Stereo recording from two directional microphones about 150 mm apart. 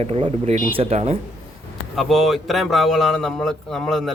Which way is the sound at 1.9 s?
Centre (ahead or behind).